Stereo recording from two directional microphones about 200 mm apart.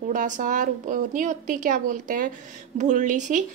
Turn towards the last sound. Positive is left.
turn(degrees=-40)  # may be behind; listen again after turning